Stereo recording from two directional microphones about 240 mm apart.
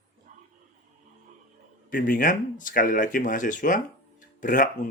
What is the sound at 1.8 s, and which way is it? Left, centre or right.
Speech, left.